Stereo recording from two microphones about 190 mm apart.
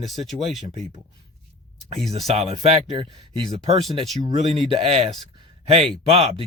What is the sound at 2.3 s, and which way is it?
Speech, 35° right (ahead or behind).